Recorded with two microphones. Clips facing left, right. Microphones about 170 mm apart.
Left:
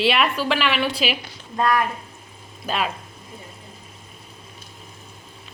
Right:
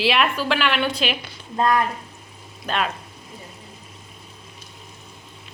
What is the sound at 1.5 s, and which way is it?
Speech, 25° right (ahead or behind).